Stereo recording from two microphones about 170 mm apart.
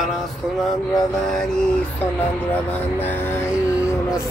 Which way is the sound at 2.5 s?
10° left (ahead or behind).